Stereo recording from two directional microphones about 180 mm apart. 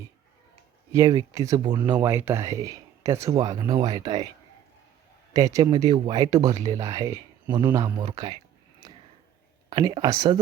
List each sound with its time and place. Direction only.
0.9 s speech: 20° right (ahead or behind)
5.3 s speech: 20° right (ahead or behind)
9.6 s speech: 25° right (ahead or behind)